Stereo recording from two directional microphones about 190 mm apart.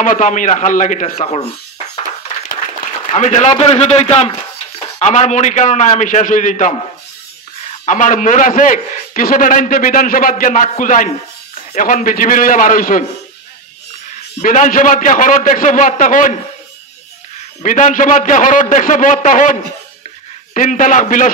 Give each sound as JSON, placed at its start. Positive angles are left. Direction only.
{"t": 0.0, "sound": "a man's voice", "side_deg": 45}
{"t": 3.1, "sound": "a man's voice", "side_deg": 35}
{"t": 7.8, "sound": "a man's voice", "side_deg": 40}
{"t": 14.4, "sound": "a man's voice", "side_deg": 45}
{"t": 17.6, "sound": "a man's voice", "side_deg": 40}
{"t": 20.5, "sound": "a man's voice", "side_deg": 45}